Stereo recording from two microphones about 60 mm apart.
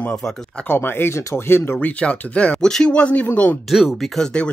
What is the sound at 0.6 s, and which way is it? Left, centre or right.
Speech, left.